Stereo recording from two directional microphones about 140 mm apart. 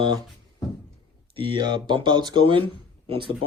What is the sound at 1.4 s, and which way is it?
Speech, 35° right (ahead or behind).